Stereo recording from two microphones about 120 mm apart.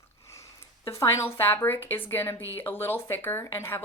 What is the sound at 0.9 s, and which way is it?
A woman's voice, 25° left (ahead or behind).